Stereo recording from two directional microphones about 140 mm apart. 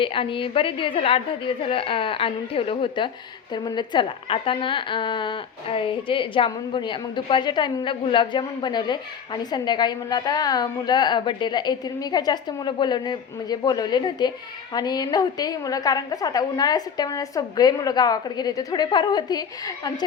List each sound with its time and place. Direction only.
0.0 s a woman's voice: 40° left (ahead or behind)